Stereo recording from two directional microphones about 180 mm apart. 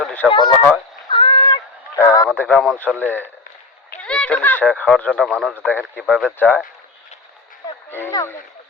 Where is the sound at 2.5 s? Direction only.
5° left (ahead or behind).